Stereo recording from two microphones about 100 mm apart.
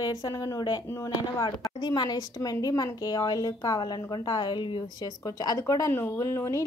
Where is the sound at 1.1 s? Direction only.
45° left (ahead or behind).